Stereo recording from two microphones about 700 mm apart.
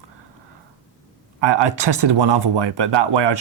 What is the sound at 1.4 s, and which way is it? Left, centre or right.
Speech, right.